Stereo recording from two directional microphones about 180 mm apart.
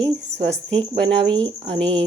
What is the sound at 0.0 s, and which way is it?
Speech, 30° right (ahead or behind).